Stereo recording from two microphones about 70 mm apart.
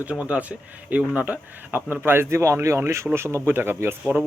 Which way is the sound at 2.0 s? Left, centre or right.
Right.